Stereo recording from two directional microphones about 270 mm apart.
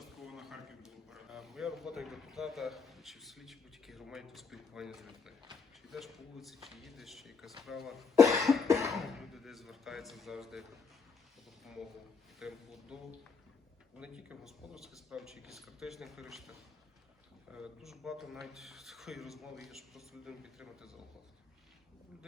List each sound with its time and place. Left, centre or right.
0.0 s a man's voice: centre
8.1 s cough: centre
8.9 s speech: centre
12.4 s speech: centre